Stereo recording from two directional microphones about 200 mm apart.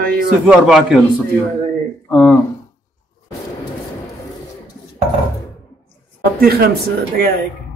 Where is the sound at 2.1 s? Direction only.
5° left (ahead or behind).